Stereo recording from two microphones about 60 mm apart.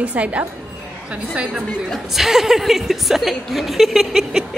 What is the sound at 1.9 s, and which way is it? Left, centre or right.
A woman's voice, centre.